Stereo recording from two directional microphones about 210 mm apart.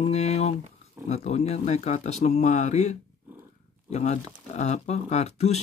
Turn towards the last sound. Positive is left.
turn(degrees=30)  # may be behind; listen again after turning